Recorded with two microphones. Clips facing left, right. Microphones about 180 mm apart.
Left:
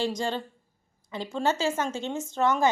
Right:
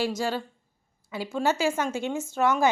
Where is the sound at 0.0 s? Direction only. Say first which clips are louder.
Right 1 dB; 5° right (ahead or behind).